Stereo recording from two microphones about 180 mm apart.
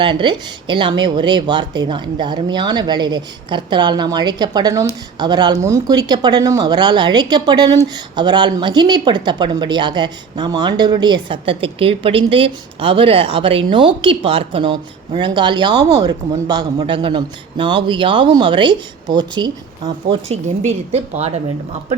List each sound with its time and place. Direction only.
0.0 s speech: 25° right (ahead or behind)